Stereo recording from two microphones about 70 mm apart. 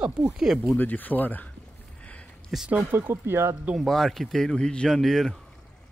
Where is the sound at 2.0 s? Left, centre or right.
Centre.